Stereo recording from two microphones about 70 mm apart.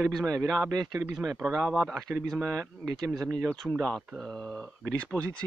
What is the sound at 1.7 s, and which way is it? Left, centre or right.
Speech, centre.